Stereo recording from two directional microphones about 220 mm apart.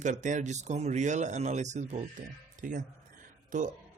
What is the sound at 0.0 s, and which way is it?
Speech, 35° right (ahead or behind).